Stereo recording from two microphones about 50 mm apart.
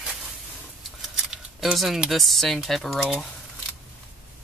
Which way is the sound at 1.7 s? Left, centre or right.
Centre.